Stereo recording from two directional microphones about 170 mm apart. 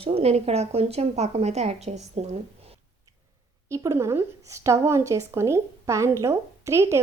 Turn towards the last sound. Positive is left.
turn(degrees=-15)  # may be behind; listen again after turning